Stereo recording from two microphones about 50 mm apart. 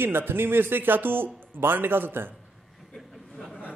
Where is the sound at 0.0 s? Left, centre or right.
Right.